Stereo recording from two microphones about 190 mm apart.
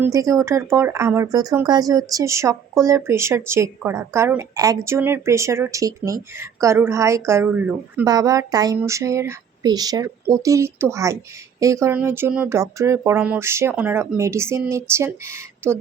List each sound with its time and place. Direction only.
0.0 s speech: 15° right (ahead or behind)
8.0 s speech: 20° right (ahead or behind)